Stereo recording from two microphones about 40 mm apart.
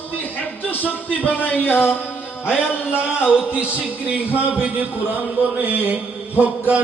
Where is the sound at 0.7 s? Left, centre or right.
Left.